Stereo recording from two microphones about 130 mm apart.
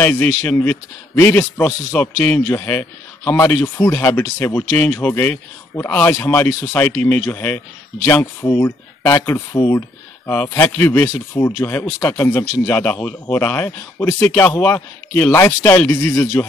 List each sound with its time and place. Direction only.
0.0 s a man's voice: 10° left (ahead or behind)
1.6 s a man's voice: 5° left (ahead or behind)